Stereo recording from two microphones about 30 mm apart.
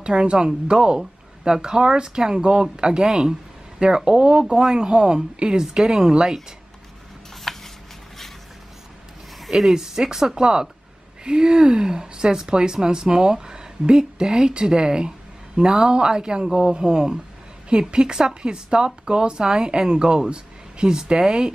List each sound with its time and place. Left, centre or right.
0.0 s speech: right
7.5 s a sound: centre
9.5 s speech: centre; by 21.5 s right